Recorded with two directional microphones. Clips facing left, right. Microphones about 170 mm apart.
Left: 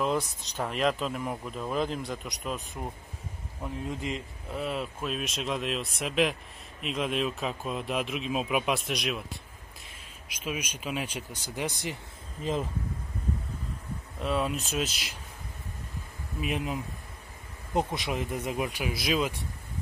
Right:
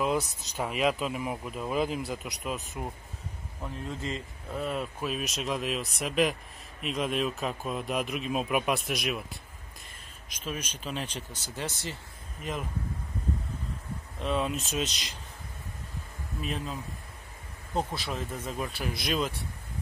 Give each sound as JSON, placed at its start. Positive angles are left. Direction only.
{"t": 0.0, "sound": "speech", "side_deg": -5}
{"t": 3.6, "sound": "speech", "side_deg": 15}
{"t": 10.2, "sound": "speech", "side_deg": 10}
{"t": 12.4, "sound": "speech", "side_deg": 25}
{"t": 14.2, "sound": "speech", "side_deg": 0}
{"t": 16.3, "sound": "speech", "side_deg": 10}